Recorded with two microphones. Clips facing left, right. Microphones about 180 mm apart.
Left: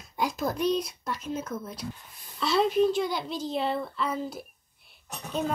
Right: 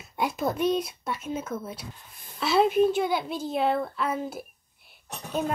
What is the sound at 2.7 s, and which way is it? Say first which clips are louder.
Speech: right 1 dB; 55° right (ahead or behind).